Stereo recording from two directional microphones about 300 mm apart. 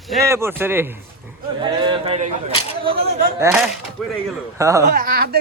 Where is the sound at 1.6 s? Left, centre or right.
Centre.